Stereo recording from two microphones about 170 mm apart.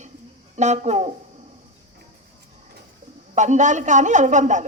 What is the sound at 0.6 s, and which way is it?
Speech, 40° right (ahead or behind).